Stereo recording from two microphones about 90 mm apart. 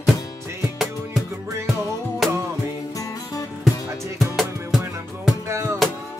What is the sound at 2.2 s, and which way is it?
Music, 5° left (ahead or behind).